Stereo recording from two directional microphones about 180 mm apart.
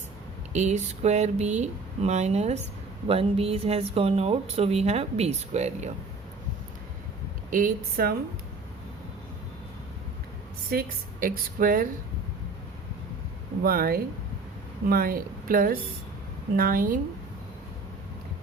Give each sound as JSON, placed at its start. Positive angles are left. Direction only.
{"t": 0.5, "sound": "speech", "side_deg": -40}
{"t": 7.5, "sound": "a woman's voice", "side_deg": -55}
{"t": 10.7, "sound": "a woman's voice", "side_deg": -55}
{"t": 13.6, "sound": "a woman's voice", "side_deg": -55}